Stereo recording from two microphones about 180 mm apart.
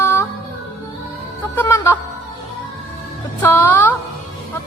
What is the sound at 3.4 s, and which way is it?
Music, 10° left (ahead or behind).